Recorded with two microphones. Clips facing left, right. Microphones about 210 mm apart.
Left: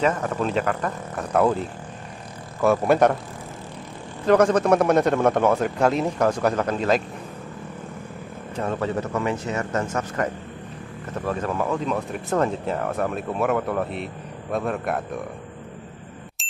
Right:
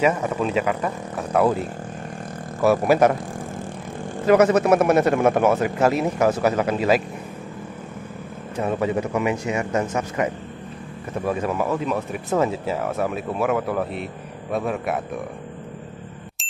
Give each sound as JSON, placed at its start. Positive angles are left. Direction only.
{"t": 0.0, "sound": "a man's voice", "side_deg": -10}
{"t": 2.9, "sound": "speech", "side_deg": 0}
{"t": 4.3, "sound": "a man's voice", "side_deg": -5}
{"t": 8.5, "sound": "a man's voice", "side_deg": -10}